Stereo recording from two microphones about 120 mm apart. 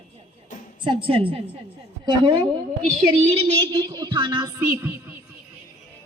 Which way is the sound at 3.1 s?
50° right (ahead or behind).